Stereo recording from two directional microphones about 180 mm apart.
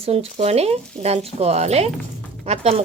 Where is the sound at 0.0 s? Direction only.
35° right (ahead or behind).